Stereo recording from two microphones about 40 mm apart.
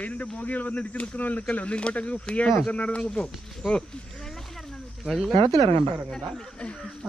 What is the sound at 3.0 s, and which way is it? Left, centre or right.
Speech, centre.